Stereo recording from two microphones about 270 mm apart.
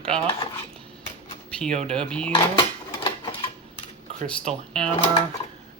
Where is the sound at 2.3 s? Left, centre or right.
Centre.